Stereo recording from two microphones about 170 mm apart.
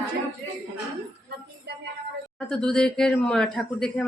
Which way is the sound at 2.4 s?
5° left (ahead or behind).